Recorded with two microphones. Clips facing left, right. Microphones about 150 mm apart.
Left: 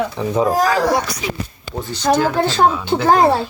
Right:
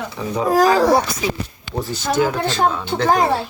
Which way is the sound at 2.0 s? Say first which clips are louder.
Left 4 dB; 40° left (ahead or behind).